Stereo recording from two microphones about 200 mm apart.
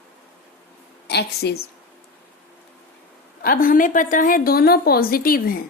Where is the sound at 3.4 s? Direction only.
45° left (ahead or behind).